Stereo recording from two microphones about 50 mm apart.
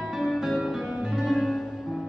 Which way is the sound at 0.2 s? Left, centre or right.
Centre.